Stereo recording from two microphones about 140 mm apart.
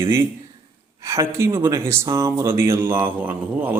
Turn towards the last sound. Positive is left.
turn(degrees=-15)  # may be behind; listen again after turning